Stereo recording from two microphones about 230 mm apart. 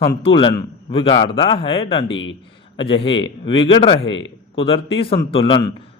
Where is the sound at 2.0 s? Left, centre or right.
Left.